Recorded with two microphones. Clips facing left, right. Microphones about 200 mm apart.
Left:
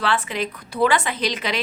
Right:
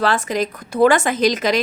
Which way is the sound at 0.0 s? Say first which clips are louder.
Right 5 dB; 40° right (ahead or behind).